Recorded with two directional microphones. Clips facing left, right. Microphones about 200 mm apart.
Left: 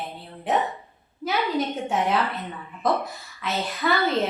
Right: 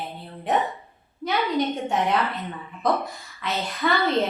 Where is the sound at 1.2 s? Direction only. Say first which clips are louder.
Right 1 dB; centre (ahead or behind).